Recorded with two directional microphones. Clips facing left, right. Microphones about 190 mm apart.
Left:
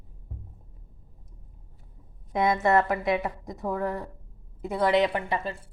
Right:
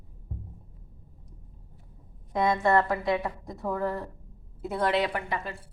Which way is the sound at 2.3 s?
20° left (ahead or behind).